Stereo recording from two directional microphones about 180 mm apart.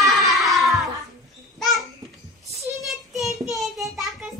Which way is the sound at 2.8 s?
Centre (ahead or behind).